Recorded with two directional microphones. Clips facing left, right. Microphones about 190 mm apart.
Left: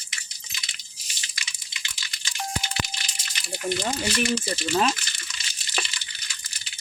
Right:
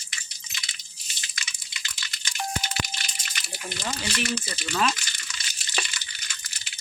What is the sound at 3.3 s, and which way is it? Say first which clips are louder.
Water: left 10 dB; 30° left (ahead or behind).